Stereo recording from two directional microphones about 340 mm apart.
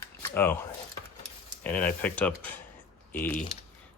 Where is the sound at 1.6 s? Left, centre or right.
Centre.